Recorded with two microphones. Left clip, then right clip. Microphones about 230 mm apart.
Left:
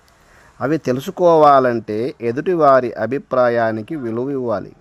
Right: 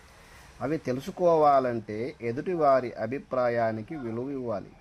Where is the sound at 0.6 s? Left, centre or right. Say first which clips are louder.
Left 11 dB; left.